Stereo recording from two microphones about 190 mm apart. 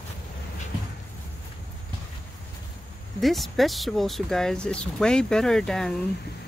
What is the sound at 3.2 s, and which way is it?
Speech, centre (ahead or behind).